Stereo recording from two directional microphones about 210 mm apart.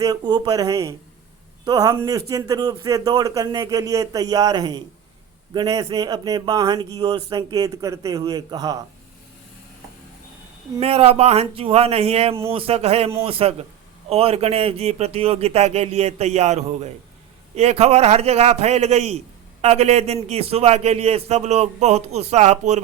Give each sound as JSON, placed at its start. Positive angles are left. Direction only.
{"t": 0.0, "sound": "speech", "side_deg": -20}
{"t": 10.8, "sound": "a man's voice", "side_deg": -30}